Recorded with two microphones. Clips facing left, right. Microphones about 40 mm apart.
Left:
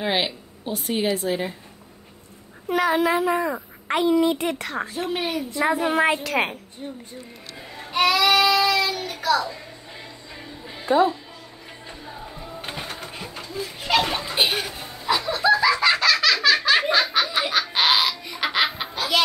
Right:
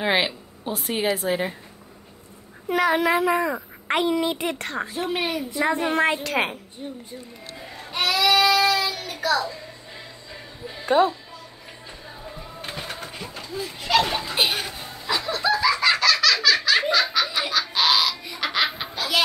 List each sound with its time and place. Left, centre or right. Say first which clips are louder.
0.1 s a woman's voice: right 2 dB; centre
2.7 s a woman's voice: even; centre
3.2 s speech: right 1 dB; right
3.4 s a woman's voice: right 1 dB; centre
4.0 s a woman's voice: left 5 dB; right
4.3 s a woman's voice: left 2 dB; centre
7.5 s a sound: left 5 dB; centre
8.4 s child singing: even; centre
10.9 s speech: even; right
12.8 s a sound: even; centre
15.0 s laughter: left 4 dB; centre; by 16.8 s left
17.1 s a sound: left 2 dB; left
18.4 s baby laughter: left 2 dB; centre